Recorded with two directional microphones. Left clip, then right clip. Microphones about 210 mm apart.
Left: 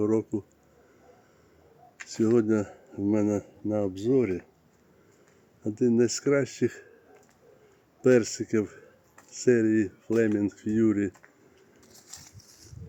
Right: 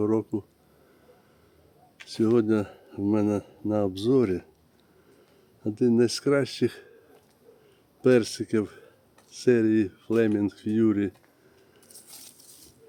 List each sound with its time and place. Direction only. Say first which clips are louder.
0.0 s speech: even; centre (ahead or behind)
2.2 s speech: right 1 dB; centre (ahead or behind)
3.8 s speech: right 2 dB; 15° right (ahead or behind)
5.8 s speech: right 1 dB; 5° right (ahead or behind)
8.0 s speech: even; 5° right (ahead or behind)